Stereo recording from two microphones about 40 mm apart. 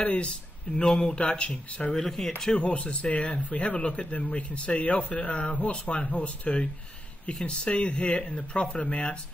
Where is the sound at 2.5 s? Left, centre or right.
Left.